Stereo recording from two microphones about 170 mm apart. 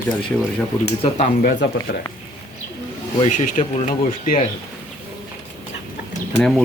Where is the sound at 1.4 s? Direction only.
55° left (ahead or behind).